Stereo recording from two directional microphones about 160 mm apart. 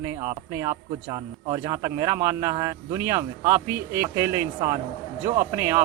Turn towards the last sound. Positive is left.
turn(degrees=-20)  # may be behind; listen again after turning